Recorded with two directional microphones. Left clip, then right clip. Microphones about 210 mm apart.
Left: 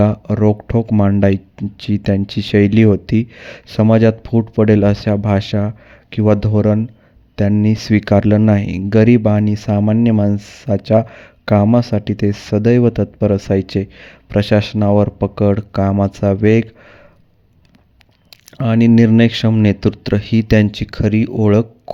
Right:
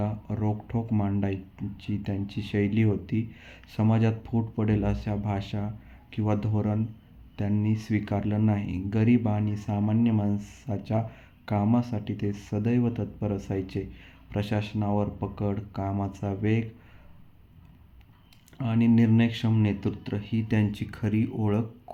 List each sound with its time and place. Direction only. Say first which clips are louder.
0.0 s speech: left 18 dB; 50° left (ahead or behind)
18.3 s speech: left 15 dB; 50° left (ahead or behind)